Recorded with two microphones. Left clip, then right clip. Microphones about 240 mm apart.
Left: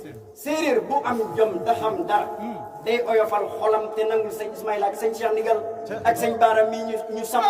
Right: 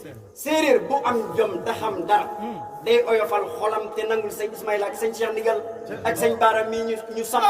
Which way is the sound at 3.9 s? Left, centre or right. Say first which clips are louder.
Left 2 dB; centre.